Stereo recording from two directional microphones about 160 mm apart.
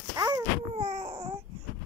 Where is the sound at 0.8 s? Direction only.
45° right (ahead or behind).